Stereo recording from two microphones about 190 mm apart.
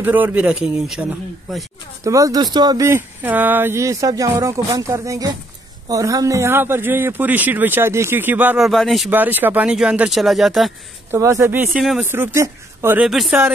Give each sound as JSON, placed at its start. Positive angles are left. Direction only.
{"t": 0.0, "sound": "a man's voice", "side_deg": -10}
{"t": 2.0, "sound": "a man's voice", "side_deg": -15}
{"t": 11.1, "sound": "a man's voice", "side_deg": -15}